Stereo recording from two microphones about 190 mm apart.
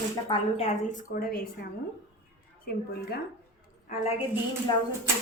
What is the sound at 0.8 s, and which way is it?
A woman's voice, 50° left (ahead or behind).